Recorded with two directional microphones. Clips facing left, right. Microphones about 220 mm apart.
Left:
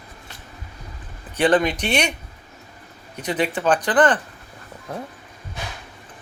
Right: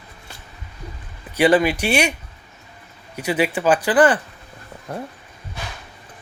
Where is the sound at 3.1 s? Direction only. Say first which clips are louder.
Right 3 dB; 10° right (ahead or behind).